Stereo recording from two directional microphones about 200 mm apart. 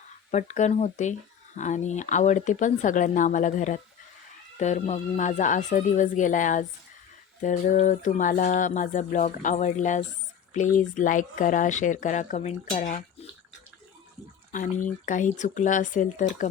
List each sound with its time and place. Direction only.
0.3 s speech: 35° left (ahead or behind)
14.5 s speech: 40° left (ahead or behind)